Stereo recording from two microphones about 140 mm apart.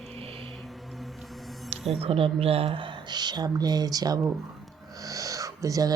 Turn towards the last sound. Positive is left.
turn(degrees=-25)  # may be behind; listen again after turning